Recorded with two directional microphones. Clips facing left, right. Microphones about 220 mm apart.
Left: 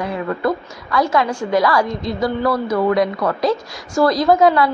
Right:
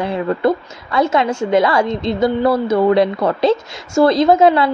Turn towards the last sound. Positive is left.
turn(degrees=-25)  # may be behind; listen again after turning